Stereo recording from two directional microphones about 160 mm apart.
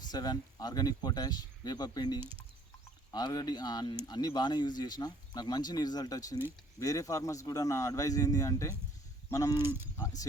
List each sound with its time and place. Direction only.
0.1 s speech: 25° left (ahead or behind)